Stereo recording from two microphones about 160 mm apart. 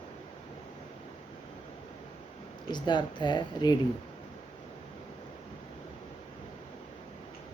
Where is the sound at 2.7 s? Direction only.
25° left (ahead or behind).